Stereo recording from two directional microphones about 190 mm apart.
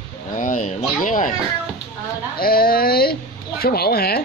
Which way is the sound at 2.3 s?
50° left (ahead or behind).